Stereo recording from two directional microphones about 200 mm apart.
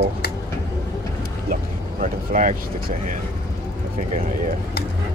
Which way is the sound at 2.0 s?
40° right (ahead or behind).